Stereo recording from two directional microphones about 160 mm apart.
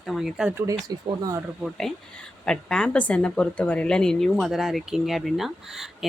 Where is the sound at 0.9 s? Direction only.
20° right (ahead or behind).